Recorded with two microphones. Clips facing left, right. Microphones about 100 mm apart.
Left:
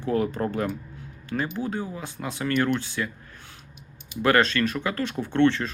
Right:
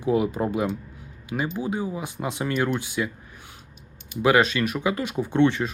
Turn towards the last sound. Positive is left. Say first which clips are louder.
# right 1 dB
turn(degrees=-15)  # may be behind; listen again after turning